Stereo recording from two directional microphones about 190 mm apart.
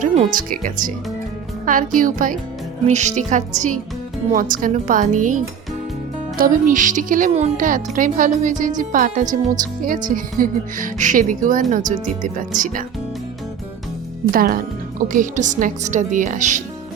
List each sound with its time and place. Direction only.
0.0 s speech: 45° right (ahead or behind)
14.3 s speech: 50° right (ahead or behind)